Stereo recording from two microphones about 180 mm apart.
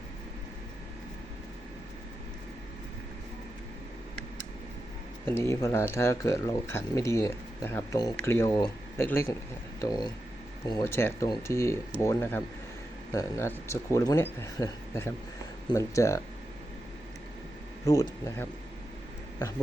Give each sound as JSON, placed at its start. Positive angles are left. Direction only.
{"t": 5.2, "sound": "speech", "side_deg": 15}
{"t": 17.8, "sound": "speech", "side_deg": 20}